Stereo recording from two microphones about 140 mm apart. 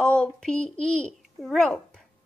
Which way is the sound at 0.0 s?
5° left (ahead or behind).